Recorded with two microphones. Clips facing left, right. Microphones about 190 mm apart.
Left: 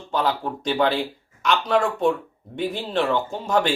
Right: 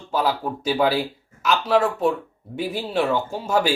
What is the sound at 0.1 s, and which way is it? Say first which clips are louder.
Speech: right 1 dB; 5° right (ahead or behind).